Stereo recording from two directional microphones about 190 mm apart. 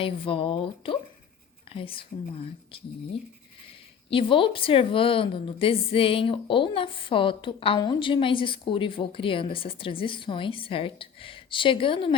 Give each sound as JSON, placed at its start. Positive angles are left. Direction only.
{"t": 0.0, "sound": "a woman's voice", "side_deg": 30}
{"t": 4.1, "sound": "a woman's voice", "side_deg": 30}